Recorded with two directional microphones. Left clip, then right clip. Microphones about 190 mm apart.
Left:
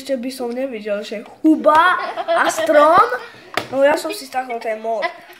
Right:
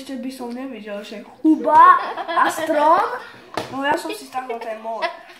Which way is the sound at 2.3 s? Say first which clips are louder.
Left 5 dB; 45° left (ahead or behind).